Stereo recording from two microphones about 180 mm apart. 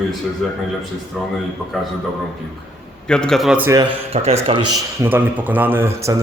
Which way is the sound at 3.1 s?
5° left (ahead or behind).